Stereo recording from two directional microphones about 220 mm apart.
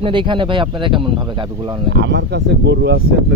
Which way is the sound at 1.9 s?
50° right (ahead or behind).